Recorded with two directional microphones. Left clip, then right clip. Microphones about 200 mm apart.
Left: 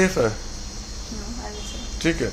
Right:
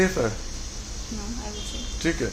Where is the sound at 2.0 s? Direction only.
25° left (ahead or behind).